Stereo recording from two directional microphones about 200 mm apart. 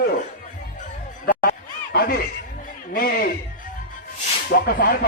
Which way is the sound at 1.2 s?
45° left (ahead or behind).